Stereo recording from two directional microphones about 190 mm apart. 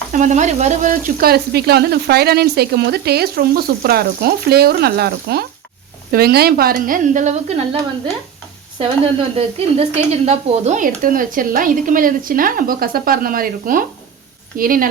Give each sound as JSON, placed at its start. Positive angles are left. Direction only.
{"t": 0.1, "sound": "frying", "side_deg": -40}
{"t": 6.1, "sound": "speech", "side_deg": -55}
{"t": 9.6, "sound": "speech", "side_deg": -30}